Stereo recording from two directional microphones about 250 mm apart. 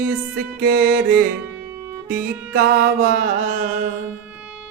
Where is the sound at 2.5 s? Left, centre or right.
Right.